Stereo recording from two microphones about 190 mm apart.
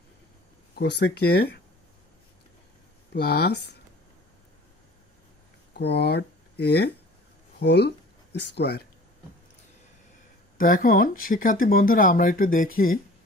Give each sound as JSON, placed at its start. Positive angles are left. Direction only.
{"t": 0.7, "sound": "speech", "side_deg": 60}
{"t": 3.1, "sound": "speech", "side_deg": 55}
{"t": 5.7, "sound": "speech", "side_deg": 60}
{"t": 10.6, "sound": "speech", "side_deg": 45}